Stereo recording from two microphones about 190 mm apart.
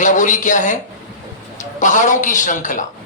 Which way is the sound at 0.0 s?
40° left (ahead or behind).